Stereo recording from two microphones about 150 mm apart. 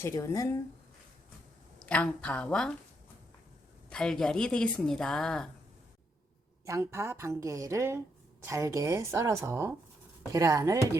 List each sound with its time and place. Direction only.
0.0 s speech: 20° left (ahead or behind)
1.9 s a woman's voice: 10° left (ahead or behind)
3.8 s a woman's voice: 5° left (ahead or behind)
6.7 s a woman's voice: 20° right (ahead or behind)